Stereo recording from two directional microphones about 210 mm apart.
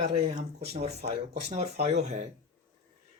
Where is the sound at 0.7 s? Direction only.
30° right (ahead or behind).